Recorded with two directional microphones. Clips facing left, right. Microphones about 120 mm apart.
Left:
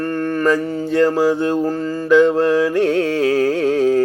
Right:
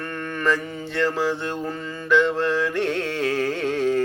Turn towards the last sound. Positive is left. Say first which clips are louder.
# left 7 dB
turn(degrees=40)  # may be behind; listen again after turning